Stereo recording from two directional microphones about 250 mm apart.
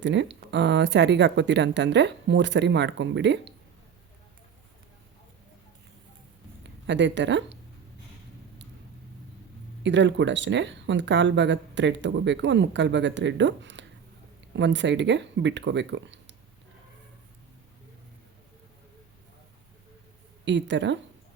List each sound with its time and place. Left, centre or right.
0.0 s speech: right
6.8 s speech: right
9.8 s speech: right
20.4 s speech: right